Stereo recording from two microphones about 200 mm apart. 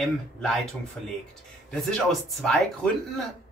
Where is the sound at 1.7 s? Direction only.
Centre (ahead or behind).